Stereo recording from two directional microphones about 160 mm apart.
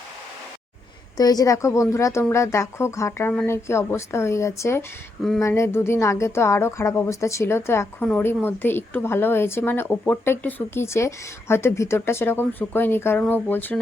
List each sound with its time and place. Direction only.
1.1 s a woman's voice: 25° left (ahead or behind)